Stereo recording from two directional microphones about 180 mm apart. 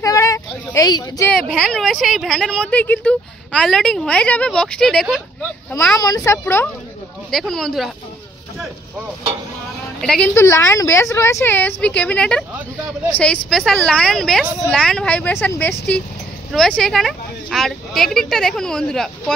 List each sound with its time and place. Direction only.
0.0 s a sound: 20° left (ahead or behind)
1.3 s speech: centre (ahead or behind)
5.4 s a woman's voice: 10° left (ahead or behind)
7.2 s speech: centre (ahead or behind)
10.0 s a woman's voice: 5° left (ahead or behind)